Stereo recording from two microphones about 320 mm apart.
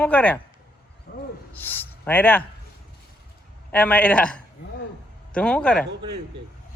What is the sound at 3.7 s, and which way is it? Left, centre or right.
Speech, centre.